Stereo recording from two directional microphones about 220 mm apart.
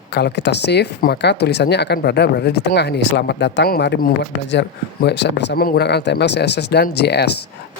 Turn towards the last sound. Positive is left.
turn(degrees=50)  # may be behind; listen again after turning